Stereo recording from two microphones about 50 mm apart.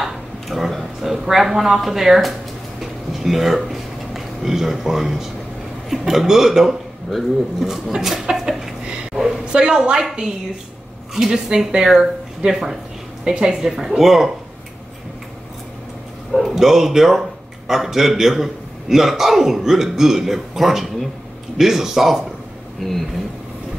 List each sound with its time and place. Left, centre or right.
0.0 s a sound: centre
0.7 s speech: centre
2.8 s a sound: centre
5.9 s speech: centre
9.1 s a sound: centre
9.4 s a woman's voice: right
11.1 s a man's voice: centre
16.3 s a man's voice: centre
22.8 s a man's voice: centre